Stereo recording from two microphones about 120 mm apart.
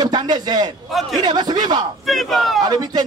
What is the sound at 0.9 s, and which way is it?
Speech, centre (ahead or behind).